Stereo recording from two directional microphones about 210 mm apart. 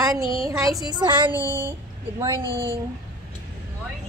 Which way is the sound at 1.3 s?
10° right (ahead or behind).